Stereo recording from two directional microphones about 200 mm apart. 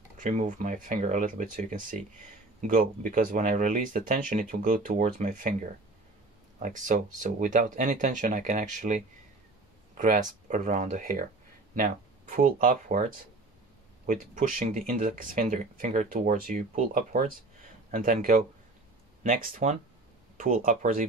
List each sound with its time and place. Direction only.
0.2 s speech: 40° right (ahead or behind)
14.0 s speech: 40° right (ahead or behind)